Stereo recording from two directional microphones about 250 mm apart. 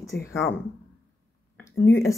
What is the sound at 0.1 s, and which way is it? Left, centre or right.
Speech, left.